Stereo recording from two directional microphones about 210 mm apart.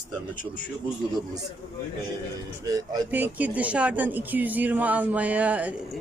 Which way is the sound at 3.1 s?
5° right (ahead or behind).